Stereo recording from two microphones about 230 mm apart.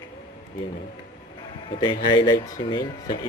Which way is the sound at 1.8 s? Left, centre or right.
Centre.